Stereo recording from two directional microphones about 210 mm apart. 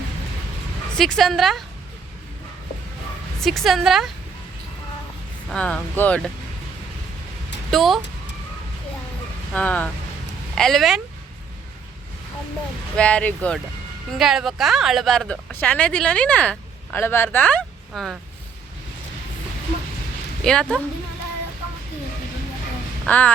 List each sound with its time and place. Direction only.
0.9 s speech: centre (ahead or behind)
3.4 s speech: centre (ahead or behind)
5.5 s speech: 5° left (ahead or behind)
7.7 s speech: centre (ahead or behind)
9.5 s speech: 5° left (ahead or behind)
13.0 s speech: 5° left (ahead or behind)
20.4 s speech: 5° left (ahead or behind)
23.0 s speech: 5° left (ahead or behind)